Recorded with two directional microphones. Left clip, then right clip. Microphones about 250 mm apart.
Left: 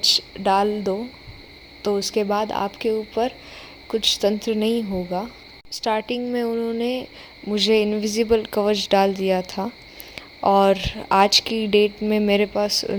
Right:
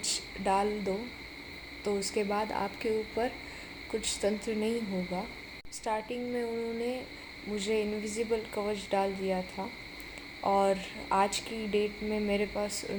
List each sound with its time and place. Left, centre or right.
0.4 s speech: left